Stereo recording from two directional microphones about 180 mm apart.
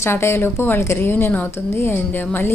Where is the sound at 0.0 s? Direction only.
15° left (ahead or behind).